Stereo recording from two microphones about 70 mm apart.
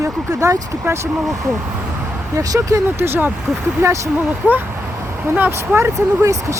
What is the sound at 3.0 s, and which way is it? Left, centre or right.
Speech, right.